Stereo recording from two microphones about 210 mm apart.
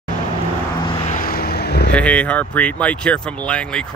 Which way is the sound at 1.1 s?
45° left (ahead or behind).